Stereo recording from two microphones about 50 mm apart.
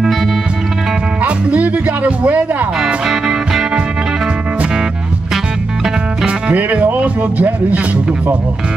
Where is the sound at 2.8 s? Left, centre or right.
Centre.